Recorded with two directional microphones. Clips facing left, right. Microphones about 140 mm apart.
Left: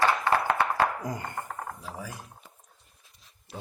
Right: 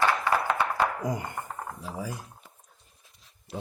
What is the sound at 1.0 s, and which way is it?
Speech, 20° right (ahead or behind).